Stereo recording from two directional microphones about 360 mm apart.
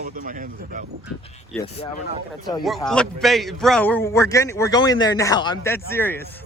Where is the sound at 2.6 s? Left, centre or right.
Centre.